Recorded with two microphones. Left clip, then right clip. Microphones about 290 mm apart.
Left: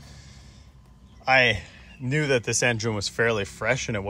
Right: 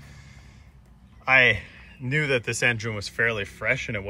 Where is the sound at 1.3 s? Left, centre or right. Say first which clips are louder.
Right 1 dB; centre.